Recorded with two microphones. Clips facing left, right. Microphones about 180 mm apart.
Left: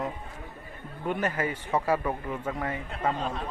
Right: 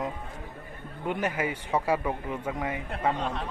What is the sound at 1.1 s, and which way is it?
A man's voice, 15° right (ahead or behind).